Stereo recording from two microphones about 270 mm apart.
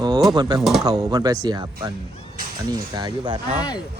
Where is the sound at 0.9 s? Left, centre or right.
Centre.